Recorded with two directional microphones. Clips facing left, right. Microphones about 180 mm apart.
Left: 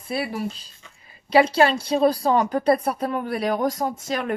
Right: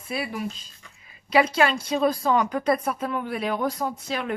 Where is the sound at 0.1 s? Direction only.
35° left (ahead or behind).